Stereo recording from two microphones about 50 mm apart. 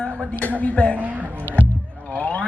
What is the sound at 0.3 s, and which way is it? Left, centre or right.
Speech, left.